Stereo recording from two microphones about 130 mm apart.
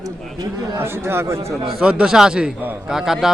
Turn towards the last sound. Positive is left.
turn(degrees=-5)  # may be behind; listen again after turning